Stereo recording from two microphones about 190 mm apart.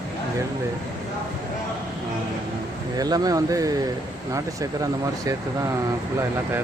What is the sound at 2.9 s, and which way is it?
Speech, 20° right (ahead or behind).